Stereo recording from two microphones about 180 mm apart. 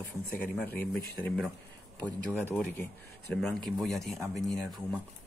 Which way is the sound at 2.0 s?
10° left (ahead or behind).